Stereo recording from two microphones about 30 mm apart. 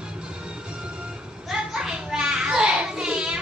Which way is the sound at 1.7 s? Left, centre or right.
Right.